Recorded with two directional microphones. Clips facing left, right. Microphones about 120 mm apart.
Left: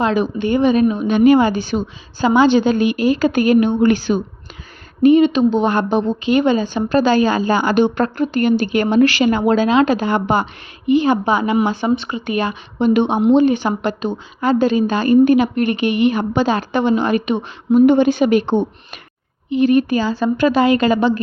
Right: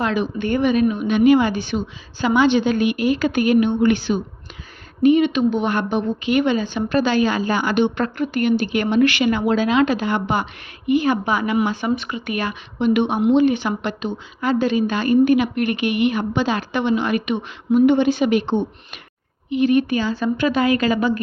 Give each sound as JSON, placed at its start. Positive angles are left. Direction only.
{"t": 0.0, "sound": "a woman's voice", "side_deg": 30}